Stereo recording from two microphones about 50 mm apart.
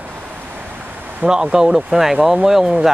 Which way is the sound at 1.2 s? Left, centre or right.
Centre.